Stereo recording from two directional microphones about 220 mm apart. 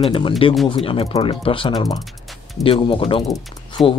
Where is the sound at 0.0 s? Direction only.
25° left (ahead or behind).